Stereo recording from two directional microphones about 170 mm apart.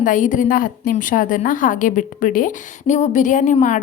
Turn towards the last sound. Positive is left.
turn(degrees=45)  # may be behind; listen again after turning